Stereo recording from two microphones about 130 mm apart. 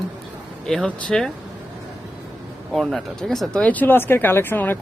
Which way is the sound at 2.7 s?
Centre (ahead or behind).